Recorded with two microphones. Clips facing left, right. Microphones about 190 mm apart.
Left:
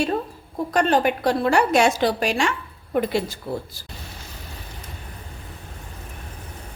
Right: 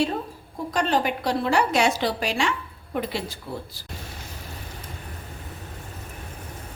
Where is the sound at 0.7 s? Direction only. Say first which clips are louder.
Left 4 dB; 55° left (ahead or behind).